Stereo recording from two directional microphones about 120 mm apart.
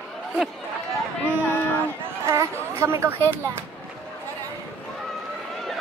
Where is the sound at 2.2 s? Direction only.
25° right (ahead or behind).